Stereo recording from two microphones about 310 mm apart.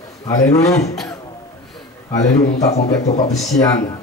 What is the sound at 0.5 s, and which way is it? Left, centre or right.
Speech, centre.